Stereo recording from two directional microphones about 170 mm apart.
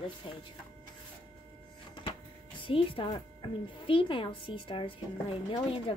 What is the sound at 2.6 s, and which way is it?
Speech, 30° left (ahead or behind).